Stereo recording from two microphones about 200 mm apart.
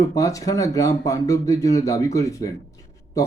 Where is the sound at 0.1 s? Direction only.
15° left (ahead or behind).